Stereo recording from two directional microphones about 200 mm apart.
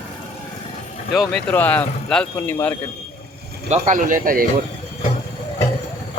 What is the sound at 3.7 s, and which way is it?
Speech, 35° right (ahead or behind).